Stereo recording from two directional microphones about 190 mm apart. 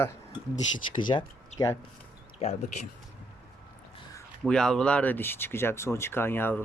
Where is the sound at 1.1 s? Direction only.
25° left (ahead or behind).